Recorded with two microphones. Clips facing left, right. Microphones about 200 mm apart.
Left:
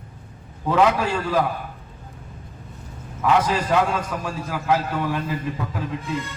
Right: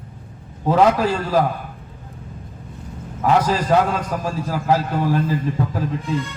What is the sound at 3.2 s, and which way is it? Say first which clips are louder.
A man's voice: right 2 dB; 40° right (ahead or behind).